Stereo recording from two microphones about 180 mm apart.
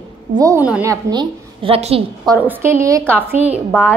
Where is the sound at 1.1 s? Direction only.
25° right (ahead or behind).